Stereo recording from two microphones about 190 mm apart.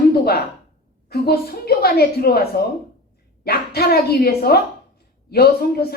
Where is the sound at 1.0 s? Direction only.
55° left (ahead or behind).